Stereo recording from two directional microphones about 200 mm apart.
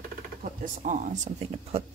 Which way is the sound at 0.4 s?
40° right (ahead or behind).